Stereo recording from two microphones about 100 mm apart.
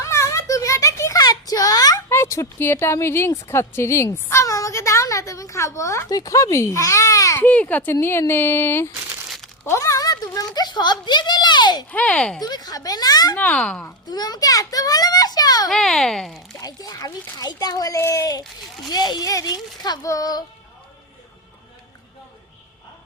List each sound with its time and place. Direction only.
0.0 s a sound: 30° left (ahead or behind)
2.0 s a woman's voice: 25° left (ahead or behind)
7.3 s a woman's voice: 15° left (ahead or behind)
9.6 s a sound: 30° left (ahead or behind)
11.9 s speech: 15° left (ahead or behind)
12.4 s a child's voice: 40° left (ahead or behind)
13.3 s speech: 15° left (ahead or behind)
14.1 s a child's voice: 40° left (ahead or behind)
15.7 s a child's voice: centre (ahead or behind)
16.6 s a child's voice: 40° left (ahead or behind)